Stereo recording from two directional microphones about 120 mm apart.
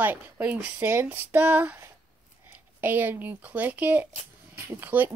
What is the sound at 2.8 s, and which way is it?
Speech, 15° right (ahead or behind).